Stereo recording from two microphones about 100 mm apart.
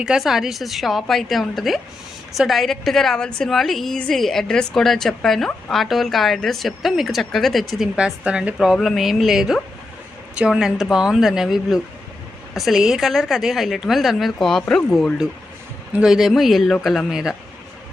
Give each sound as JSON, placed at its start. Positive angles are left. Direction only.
{"t": 0.0, "sound": "a woman's voice", "side_deg": -5}
{"t": 15.9, "sound": "a woman's voice", "side_deg": -10}